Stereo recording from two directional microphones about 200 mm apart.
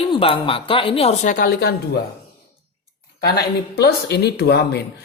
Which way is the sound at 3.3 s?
50° left (ahead or behind).